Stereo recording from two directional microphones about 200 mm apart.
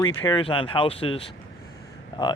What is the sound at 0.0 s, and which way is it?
Speech, 20° left (ahead or behind).